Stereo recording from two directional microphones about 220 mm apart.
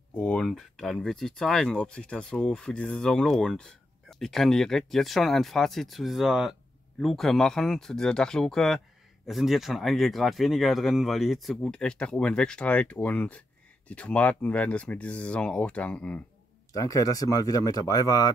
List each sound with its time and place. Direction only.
0.1 s speech: 5° left (ahead or behind)